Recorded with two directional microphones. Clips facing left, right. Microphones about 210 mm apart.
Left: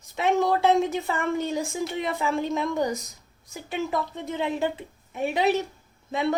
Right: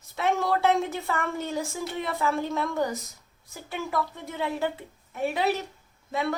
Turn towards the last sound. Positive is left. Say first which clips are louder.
# left 3 dB
turn(degrees=20)  # may be behind; listen again after turning